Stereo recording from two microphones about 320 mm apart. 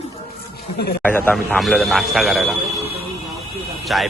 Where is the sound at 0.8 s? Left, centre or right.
Left.